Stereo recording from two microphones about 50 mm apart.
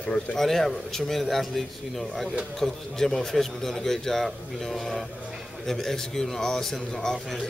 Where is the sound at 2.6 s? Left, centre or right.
Centre.